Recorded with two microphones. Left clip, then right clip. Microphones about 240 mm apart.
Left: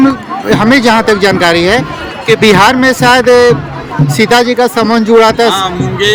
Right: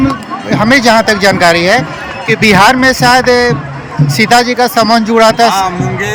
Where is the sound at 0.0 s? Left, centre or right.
Centre.